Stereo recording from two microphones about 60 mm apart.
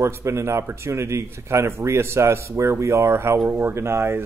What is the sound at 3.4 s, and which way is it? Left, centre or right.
Speech, right.